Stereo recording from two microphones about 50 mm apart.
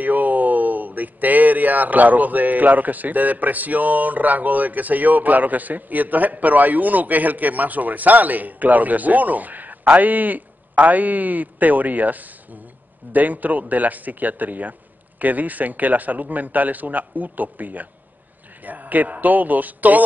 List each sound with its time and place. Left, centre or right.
0.0 s speech: right